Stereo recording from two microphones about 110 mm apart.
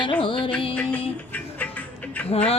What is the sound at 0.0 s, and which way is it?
Music, 50° left (ahead or behind).